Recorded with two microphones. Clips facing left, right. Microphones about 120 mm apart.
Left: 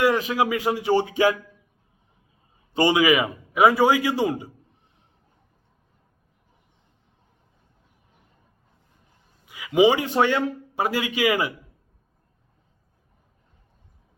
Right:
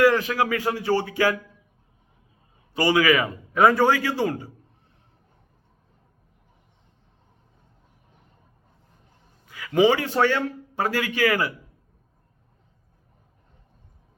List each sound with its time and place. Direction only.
0.0 s a man's voice: 20° left (ahead or behind)
2.7 s a man's voice: 20° left (ahead or behind)
9.5 s a man's voice: 15° left (ahead or behind)